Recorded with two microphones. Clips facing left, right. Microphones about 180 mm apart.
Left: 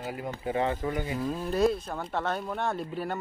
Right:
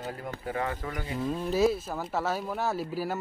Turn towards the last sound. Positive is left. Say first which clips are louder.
# right 1 dB
turn(degrees=-5)  # may be behind; listen again after turning